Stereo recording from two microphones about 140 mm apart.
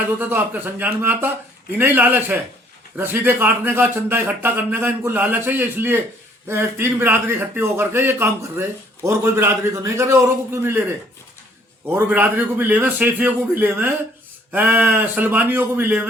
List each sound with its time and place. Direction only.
0.2 s a man's voice: 15° right (ahead or behind)